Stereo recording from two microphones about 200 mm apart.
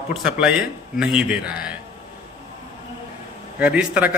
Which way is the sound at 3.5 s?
5° right (ahead or behind).